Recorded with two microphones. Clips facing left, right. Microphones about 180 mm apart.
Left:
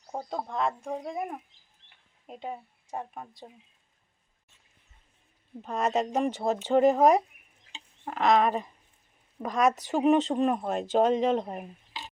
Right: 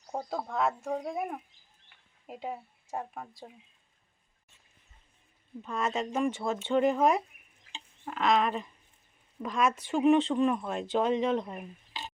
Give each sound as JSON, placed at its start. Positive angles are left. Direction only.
{"t": 0.1, "sound": "speech", "side_deg": 5}
{"t": 5.6, "sound": "speech", "side_deg": 40}